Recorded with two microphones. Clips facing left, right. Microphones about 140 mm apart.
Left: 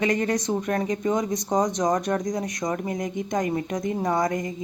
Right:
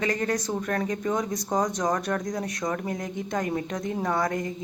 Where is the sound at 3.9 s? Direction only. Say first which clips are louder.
Left 2 dB; 15° left (ahead or behind).